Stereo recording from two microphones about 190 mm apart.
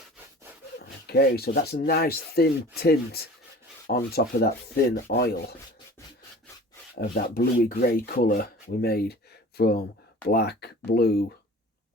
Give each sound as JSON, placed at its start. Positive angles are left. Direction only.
{"t": 1.0, "sound": "speech", "side_deg": 55}
{"t": 6.9, "sound": "speech", "side_deg": 50}